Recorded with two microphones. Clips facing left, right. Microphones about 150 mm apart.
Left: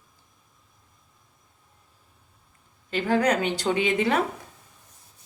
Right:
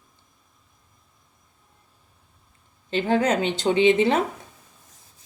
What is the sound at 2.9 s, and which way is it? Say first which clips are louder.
A woman's voice: right 1 dB; 25° right (ahead or behind).